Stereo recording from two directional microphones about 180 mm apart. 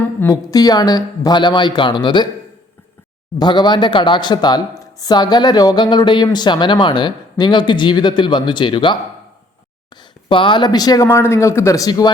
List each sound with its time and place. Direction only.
0.2 s speech: 20° left (ahead or behind)
3.3 s speech: 25° left (ahead or behind)